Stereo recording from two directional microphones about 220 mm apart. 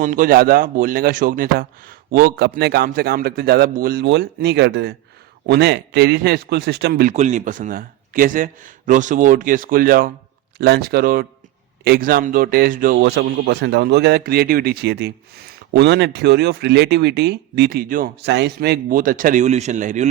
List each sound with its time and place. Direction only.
0.0 s a man's voice: 35° right (ahead or behind)